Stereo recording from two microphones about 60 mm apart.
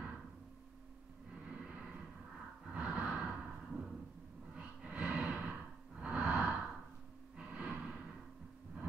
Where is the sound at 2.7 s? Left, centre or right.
Centre.